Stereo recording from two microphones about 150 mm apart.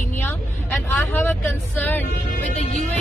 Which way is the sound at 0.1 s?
15° left (ahead or behind).